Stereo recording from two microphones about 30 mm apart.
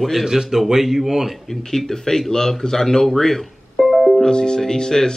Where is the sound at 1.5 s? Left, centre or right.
Centre.